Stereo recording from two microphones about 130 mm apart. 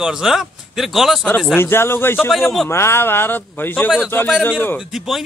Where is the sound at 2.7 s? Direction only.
20° left (ahead or behind).